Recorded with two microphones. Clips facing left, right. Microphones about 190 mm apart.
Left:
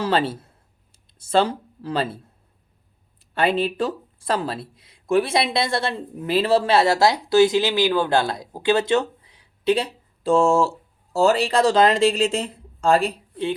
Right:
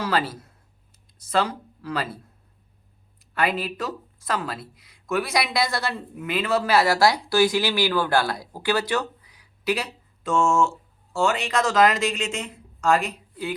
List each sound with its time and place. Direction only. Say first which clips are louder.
0.0 s speech: left 4 dB; 25° left (ahead or behind)
3.3 s speech: left 5 dB; 30° left (ahead or behind)